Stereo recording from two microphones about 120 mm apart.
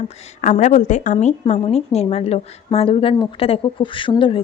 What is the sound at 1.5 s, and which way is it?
Speech, 60° left (ahead or behind).